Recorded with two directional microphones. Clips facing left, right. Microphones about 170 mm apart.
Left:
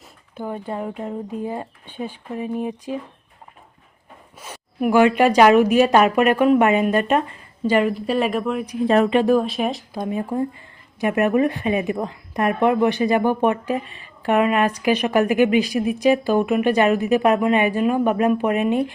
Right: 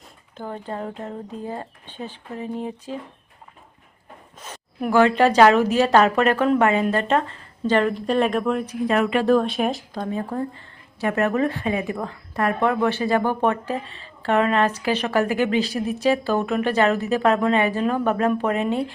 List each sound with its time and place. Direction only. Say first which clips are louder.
0.3 s speech: left 3 dB; 10° left (ahead or behind)
4.4 s speech: left 4 dB; 10° left (ahead or behind)
8.8 s speech: left 5 dB; 30° left (ahead or behind)
9.2 s speech: even; 5° left (ahead or behind)
10.0 s speech: left 4 dB; 15° left (ahead or behind)